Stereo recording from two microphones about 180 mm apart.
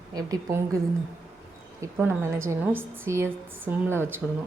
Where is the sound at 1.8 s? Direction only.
15° right (ahead or behind).